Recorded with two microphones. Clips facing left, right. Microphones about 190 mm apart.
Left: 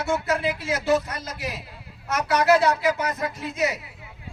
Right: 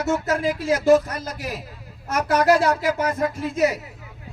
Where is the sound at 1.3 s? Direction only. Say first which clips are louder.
Right 2 dB; 40° right (ahead or behind).